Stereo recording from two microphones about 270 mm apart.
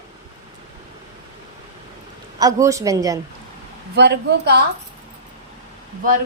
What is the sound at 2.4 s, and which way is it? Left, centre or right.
Speech, centre.